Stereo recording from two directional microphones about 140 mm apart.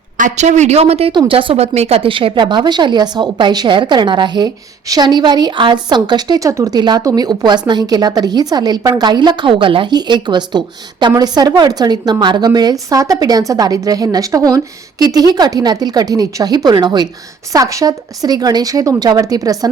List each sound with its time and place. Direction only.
0.2 s a woman's voice: 55° right (ahead or behind); by 19.5 s 25° right (ahead or behind)